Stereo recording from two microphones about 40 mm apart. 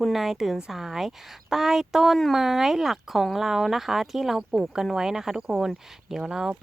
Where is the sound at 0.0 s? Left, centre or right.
Centre.